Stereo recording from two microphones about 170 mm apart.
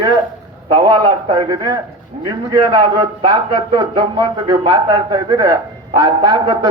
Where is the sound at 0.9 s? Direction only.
25° right (ahead or behind).